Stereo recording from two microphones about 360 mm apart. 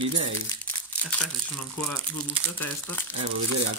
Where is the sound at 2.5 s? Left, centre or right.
Centre.